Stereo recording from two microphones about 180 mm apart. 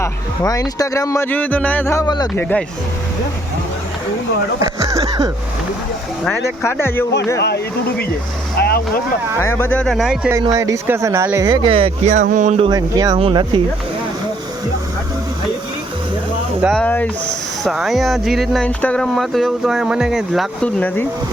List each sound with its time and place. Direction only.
0.0 s speech: 20° left (ahead or behind)
2.3 s speech: 10° left (ahead or behind)
4.6 s a sound: 20° right (ahead or behind)
6.6 s speech: 15° left (ahead or behind)
7.3 s speech: 65° left (ahead or behind)
8.5 s boat: 60° left (ahead or behind)
9.4 s speech: 15° left (ahead or behind); by 10.3 s centre (ahead or behind)
10.4 s speech: 20° right (ahead or behind)
11.7 s speech: 35° right (ahead or behind)
16.7 s speech: 10° left (ahead or behind)